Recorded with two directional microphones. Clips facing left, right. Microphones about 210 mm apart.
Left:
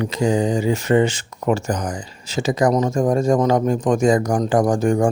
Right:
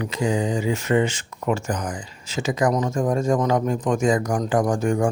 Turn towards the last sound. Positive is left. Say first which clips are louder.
# left 4 dB
turn(degrees=35)  # may be behind; listen again after turning